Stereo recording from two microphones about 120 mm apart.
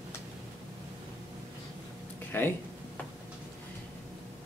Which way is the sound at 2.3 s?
15° left (ahead or behind).